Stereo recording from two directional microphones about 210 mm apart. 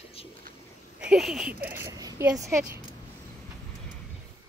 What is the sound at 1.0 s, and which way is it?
Speech, centre (ahead or behind).